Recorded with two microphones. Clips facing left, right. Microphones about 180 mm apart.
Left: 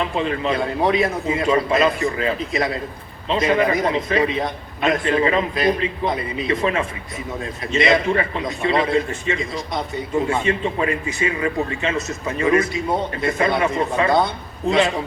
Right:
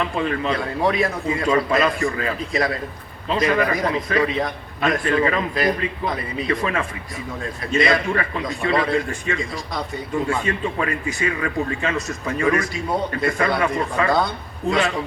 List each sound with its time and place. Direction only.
0.3 s a man's voice: 25° left (ahead or behind)